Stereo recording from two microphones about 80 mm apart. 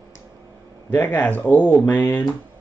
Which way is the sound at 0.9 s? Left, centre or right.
Centre.